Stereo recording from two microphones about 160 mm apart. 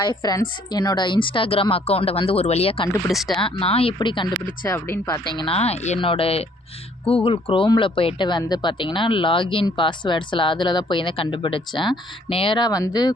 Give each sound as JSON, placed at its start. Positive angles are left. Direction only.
{"t": 0.2, "sound": "speech", "side_deg": 25}
{"t": 3.1, "sound": "speech", "side_deg": 0}
{"t": 3.3, "sound": "speech", "side_deg": 35}
{"t": 4.4, "sound": "speech", "side_deg": 15}
{"t": 5.4, "sound": "speech", "side_deg": 40}